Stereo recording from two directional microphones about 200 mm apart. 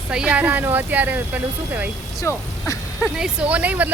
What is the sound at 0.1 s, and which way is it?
Speech, 5° right (ahead or behind).